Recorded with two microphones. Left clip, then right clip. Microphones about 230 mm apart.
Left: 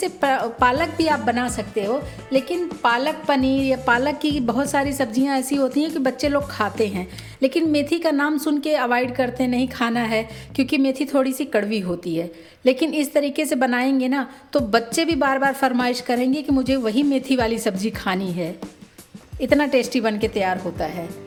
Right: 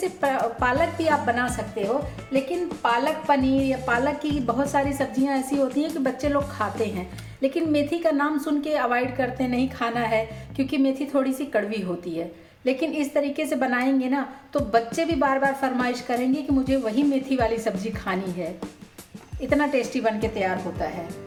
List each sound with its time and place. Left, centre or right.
0.0 s a woman's voice: left